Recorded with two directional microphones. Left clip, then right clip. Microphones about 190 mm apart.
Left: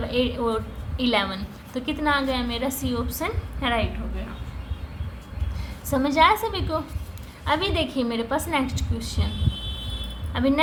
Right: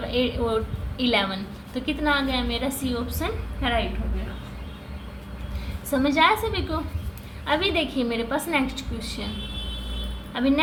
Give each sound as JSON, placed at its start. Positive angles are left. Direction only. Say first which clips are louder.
{"t": 0.1, "sound": "a woman's voice", "louder": "even", "side_deg": 20}
{"t": 5.9, "sound": "a woman's voice", "louder": "left 1 dB", "side_deg": 20}
{"t": 10.3, "sound": "a woman's voice", "louder": "even", "side_deg": 20}